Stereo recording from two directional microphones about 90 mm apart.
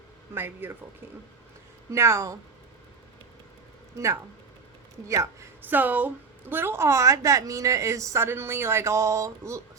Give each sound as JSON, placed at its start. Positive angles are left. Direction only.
{"t": 0.3, "sound": "speech", "side_deg": -25}
{"t": 1.9, "sound": "a woman's voice", "side_deg": -30}
{"t": 3.9, "sound": "a woman's voice", "side_deg": -35}
{"t": 5.6, "sound": "a woman's voice", "side_deg": -20}